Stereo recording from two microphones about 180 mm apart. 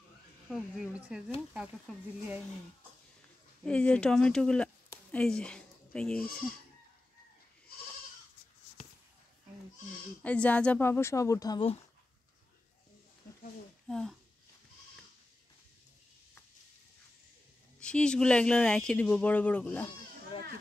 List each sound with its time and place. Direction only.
0.5 s speech: 5° right (ahead or behind)
3.6 s speech: 5° left (ahead or behind)
4.8 s a sound: 5° left (ahead or behind)
10.2 s a woman's voice: 5° left (ahead or behind)
13.8 s speech: 5° left (ahead or behind)
17.7 s speech: 5° left (ahead or behind)